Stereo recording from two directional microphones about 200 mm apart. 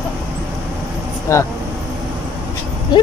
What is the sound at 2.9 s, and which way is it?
Speech, 20° left (ahead or behind).